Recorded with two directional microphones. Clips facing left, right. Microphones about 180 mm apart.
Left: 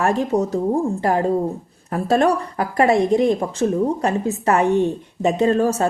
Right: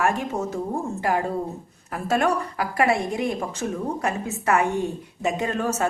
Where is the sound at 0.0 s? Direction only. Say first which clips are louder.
Left 6 dB; 35° left (ahead or behind).